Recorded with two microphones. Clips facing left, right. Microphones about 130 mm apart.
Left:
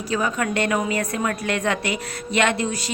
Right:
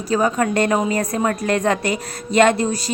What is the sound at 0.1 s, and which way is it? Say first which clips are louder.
A woman's voice: right 5 dB; 40° right (ahead or behind).